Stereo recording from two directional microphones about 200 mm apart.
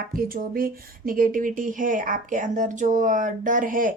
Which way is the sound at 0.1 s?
45° right (ahead or behind).